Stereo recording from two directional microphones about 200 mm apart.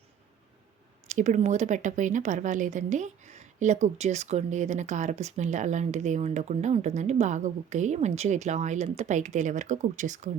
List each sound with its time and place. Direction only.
1.0 s a woman's voice: 35° right (ahead or behind)